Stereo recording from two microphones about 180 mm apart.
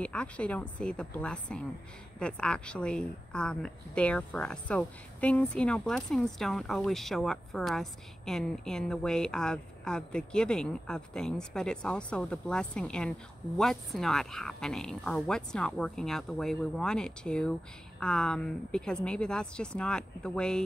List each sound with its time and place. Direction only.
0.0 s a woman's voice: 5° left (ahead or behind)